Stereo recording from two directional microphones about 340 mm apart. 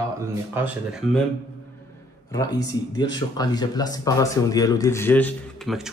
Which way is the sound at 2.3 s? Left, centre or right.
Centre.